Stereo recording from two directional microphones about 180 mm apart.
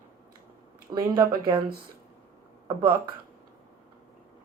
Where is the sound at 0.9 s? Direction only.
25° right (ahead or behind).